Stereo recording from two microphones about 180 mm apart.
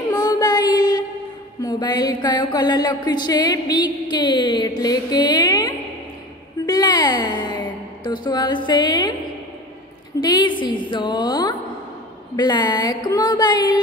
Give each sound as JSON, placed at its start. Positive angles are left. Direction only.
{"t": 0.1, "sound": "child singing", "side_deg": 20}
{"t": 1.6, "sound": "mantra", "side_deg": 20}
{"t": 6.6, "sound": "a woman's voice", "side_deg": 20}
{"t": 10.2, "sound": "mantra", "side_deg": 25}